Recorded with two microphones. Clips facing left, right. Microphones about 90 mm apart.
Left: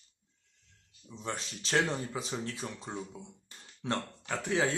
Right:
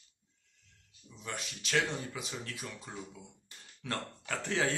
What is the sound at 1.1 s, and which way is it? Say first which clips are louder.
Speech: left 4 dB; 30° left (ahead or behind).